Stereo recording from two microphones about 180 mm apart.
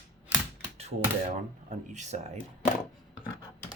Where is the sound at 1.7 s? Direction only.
40° right (ahead or behind).